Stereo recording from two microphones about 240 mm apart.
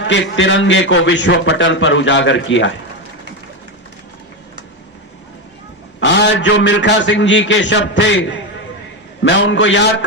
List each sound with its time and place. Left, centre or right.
0.1 s a man's voice: left
6.0 s a man's voice: left